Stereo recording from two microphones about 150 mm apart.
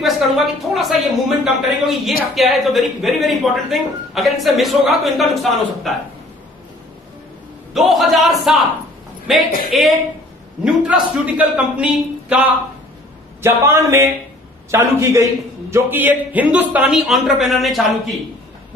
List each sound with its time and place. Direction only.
0.0 s speech: centre (ahead or behind)
7.7 s a man's voice: centre (ahead or behind)